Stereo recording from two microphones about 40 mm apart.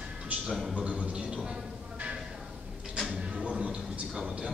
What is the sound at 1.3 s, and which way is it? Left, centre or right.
Music, right.